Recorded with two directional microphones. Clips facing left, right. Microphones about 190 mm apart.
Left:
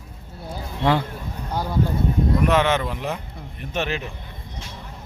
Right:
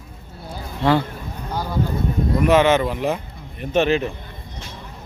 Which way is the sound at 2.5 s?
5° right (ahead or behind).